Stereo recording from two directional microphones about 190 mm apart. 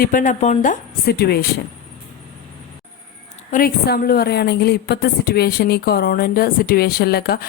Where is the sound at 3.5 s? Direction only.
50° left (ahead or behind).